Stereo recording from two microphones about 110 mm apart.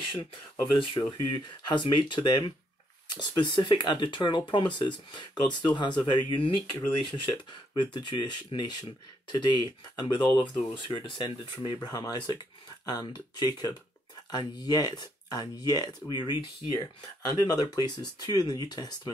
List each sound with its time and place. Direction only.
0.7 s speech: 45° left (ahead or behind)